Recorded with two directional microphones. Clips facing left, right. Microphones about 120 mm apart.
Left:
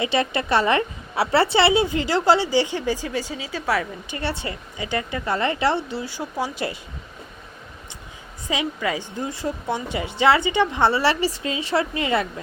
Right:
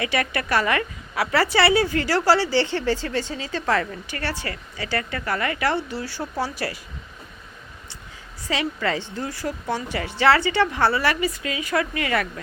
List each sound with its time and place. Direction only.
0.0 s a woman's voice: 25° left (ahead or behind)
4.1 s a woman's voice: 20° left (ahead or behind)
8.4 s a woman's voice: 15° left (ahead or behind)